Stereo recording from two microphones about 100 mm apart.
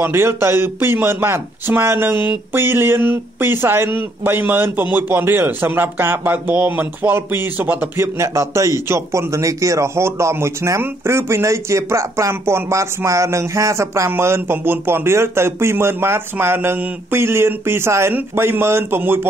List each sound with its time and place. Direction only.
0.0 s speech: 25° right (ahead or behind)
8.2 s speech: 30° right (ahead or behind)